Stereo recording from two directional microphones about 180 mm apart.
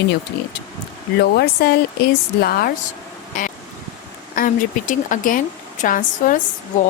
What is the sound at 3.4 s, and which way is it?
Speech, 45° left (ahead or behind).